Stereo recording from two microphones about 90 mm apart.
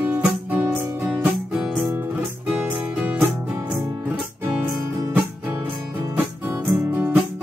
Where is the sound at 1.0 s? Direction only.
10° right (ahead or behind).